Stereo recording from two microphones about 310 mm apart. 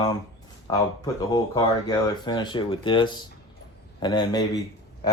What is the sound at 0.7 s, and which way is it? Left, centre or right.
Speech, centre.